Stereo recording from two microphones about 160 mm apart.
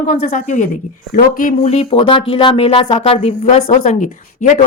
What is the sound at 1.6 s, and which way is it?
A woman's voice, 40° left (ahead or behind).